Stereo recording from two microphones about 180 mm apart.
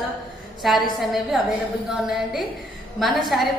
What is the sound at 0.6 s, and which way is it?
Speech, centre (ahead or behind).